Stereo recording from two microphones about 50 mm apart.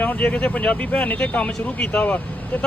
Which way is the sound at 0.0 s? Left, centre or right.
Left.